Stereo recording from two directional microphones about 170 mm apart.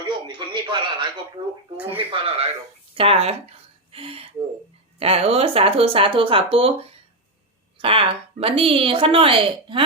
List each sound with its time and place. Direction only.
0.0 s radio: 25° right (ahead or behind)
1.4 s a woman's voice: 30° right (ahead or behind)